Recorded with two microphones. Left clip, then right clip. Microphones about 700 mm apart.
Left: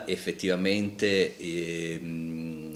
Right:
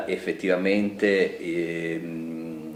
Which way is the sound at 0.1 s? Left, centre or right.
Left.